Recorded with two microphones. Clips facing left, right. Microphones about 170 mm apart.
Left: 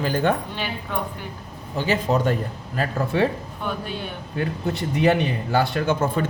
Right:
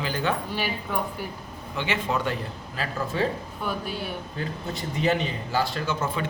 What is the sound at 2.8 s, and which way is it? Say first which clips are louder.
Speech: left 5 dB; 65° left (ahead or behind).